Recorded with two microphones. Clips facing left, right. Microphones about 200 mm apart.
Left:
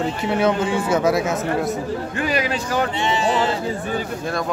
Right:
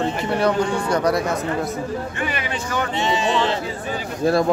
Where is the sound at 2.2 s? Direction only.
35° left (ahead or behind).